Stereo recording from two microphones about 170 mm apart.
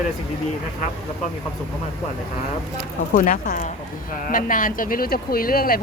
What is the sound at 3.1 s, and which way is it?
A woman's voice, 50° left (ahead or behind).